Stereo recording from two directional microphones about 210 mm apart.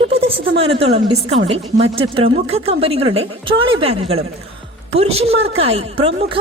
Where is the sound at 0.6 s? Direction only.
30° right (ahead or behind).